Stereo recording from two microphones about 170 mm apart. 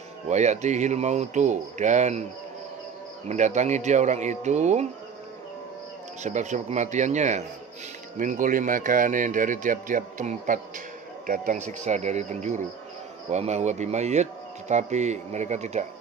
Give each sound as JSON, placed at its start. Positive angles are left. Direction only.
{"t": 0.3, "sound": "speech", "side_deg": -40}
{"t": 3.2, "sound": "speech", "side_deg": -45}
{"t": 6.2, "sound": "speech", "side_deg": -45}